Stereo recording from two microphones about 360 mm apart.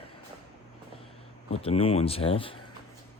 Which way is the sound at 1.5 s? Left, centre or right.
Centre.